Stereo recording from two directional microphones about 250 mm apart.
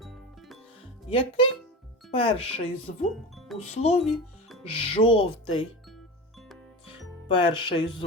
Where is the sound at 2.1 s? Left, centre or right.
Left.